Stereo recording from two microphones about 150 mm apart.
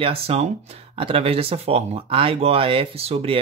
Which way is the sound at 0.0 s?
40° right (ahead or behind).